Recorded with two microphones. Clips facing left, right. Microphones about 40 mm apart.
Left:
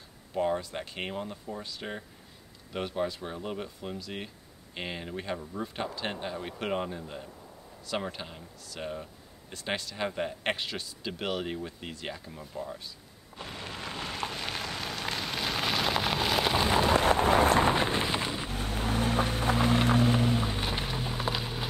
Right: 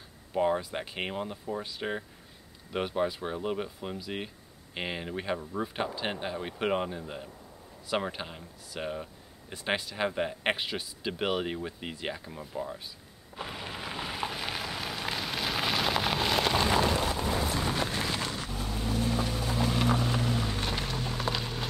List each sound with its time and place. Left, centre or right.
0.3 s speech: centre
13.4 s rain on surface: centre
16.9 s run: left
17.6 s a sound: left
18.5 s boat: left; by 21.6 s centre